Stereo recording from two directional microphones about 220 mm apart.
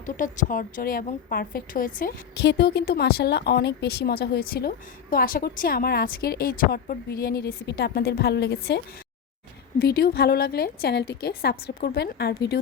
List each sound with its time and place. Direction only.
0.0 s a woman's voice: 35° left (ahead or behind)